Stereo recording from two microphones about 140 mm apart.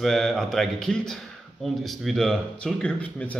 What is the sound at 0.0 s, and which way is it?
A man's voice, centre (ahead or behind).